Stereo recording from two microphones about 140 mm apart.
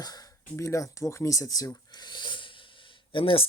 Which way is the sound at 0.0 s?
25° left (ahead or behind).